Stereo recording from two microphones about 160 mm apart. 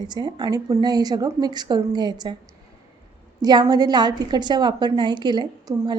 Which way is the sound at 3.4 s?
25° right (ahead or behind).